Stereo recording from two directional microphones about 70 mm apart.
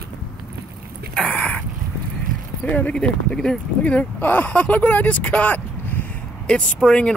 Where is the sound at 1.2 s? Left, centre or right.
Centre.